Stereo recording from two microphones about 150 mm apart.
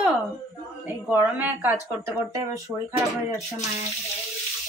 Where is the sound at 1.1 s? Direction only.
10° right (ahead or behind).